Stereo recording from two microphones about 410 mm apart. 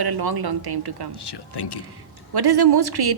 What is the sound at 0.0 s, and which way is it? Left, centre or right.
A woman's voice, right.